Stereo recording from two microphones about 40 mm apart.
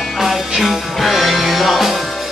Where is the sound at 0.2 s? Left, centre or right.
Centre.